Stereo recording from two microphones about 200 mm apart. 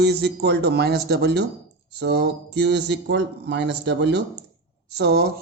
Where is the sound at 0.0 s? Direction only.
55° right (ahead or behind).